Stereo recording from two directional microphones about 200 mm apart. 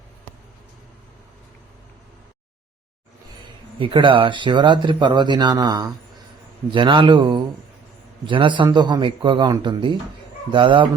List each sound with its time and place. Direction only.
3.8 s speech: 25° right (ahead or behind)